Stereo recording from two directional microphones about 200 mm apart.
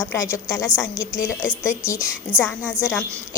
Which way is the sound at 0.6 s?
5° right (ahead or behind).